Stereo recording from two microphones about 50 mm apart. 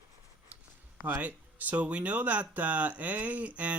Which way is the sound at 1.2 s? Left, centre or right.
Right.